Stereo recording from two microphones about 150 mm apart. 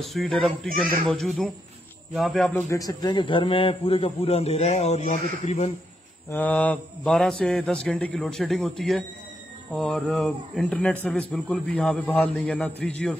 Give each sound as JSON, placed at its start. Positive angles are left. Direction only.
{"t": 0.0, "sound": "a man's voice", "side_deg": 0}
{"t": 2.7, "sound": "a man's voice", "side_deg": 25}
{"t": 6.3, "sound": "a man's voice", "side_deg": 10}